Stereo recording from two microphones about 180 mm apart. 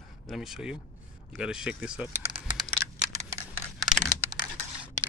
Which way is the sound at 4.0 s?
20° right (ahead or behind).